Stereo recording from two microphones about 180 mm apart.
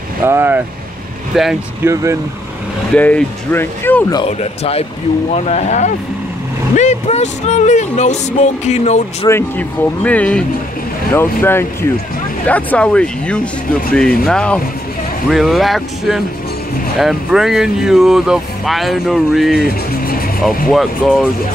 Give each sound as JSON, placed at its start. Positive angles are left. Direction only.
{"t": 0.2, "sound": "speech", "side_deg": -15}
{"t": 1.3, "sound": "speech", "side_deg": 0}
{"t": 1.8, "sound": "speech", "side_deg": -15}
{"t": 2.9, "sound": "speech", "side_deg": 5}
{"t": 4.3, "sound": "speech", "side_deg": 35}
{"t": 9.3, "sound": "speech", "side_deg": 10}